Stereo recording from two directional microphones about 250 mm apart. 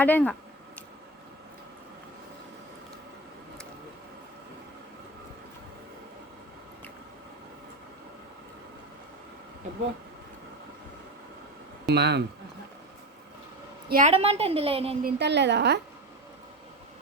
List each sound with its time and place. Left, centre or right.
0.0 s speech: centre
11.9 s speech: right
13.9 s a woman's voice: right
15.0 s a woman's voice: right